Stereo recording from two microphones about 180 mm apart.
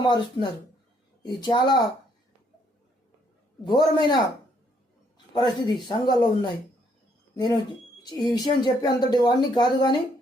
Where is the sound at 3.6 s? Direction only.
25° left (ahead or behind).